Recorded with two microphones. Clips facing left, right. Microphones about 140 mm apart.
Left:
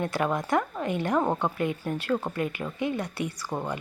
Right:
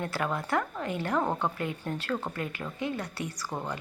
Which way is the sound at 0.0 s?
20° left (ahead or behind).